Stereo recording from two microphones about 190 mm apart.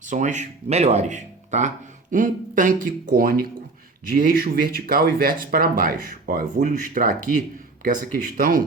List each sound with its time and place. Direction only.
0.0 s speech: 40° right (ahead or behind)
8.4 s speech: 45° right (ahead or behind)